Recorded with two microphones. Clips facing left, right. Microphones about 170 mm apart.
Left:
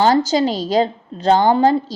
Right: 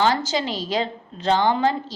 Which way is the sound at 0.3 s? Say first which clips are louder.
Left 7 dB; 40° left (ahead or behind).